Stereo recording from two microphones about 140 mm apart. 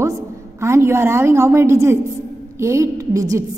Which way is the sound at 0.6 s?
20° right (ahead or behind).